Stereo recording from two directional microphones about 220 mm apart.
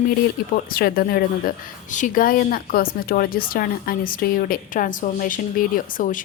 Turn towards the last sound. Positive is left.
turn(degrees=40)  # may be behind; listen again after turning